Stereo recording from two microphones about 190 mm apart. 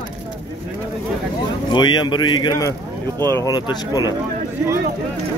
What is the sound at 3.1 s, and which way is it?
Speech, 20° right (ahead or behind).